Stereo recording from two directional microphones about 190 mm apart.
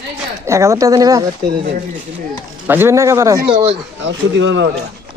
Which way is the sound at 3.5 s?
35° right (ahead or behind).